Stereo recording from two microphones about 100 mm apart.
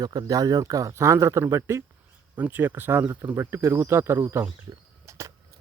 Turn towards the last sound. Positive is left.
turn(degrees=-30)  # may be behind; listen again after turning